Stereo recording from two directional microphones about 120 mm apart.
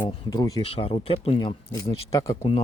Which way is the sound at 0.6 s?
50° left (ahead or behind).